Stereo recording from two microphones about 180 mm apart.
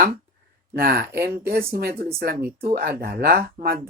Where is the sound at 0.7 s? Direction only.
55° right (ahead or behind).